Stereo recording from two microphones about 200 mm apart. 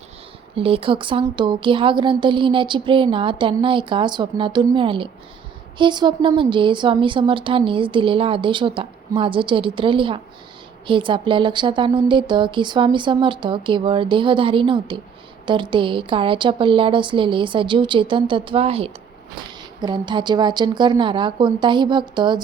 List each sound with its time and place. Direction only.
0.5 s speech: 25° right (ahead or behind)